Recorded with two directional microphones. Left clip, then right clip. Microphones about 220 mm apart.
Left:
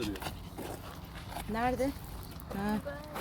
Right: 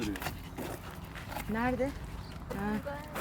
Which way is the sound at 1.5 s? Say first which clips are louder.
Left 1 dB; 50° left (ahead or behind).